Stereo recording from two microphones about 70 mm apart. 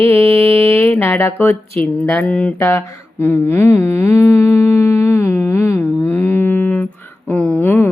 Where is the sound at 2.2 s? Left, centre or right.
Left.